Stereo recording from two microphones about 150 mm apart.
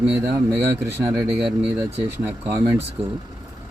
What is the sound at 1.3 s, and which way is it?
Speech, 10° right (ahead or behind).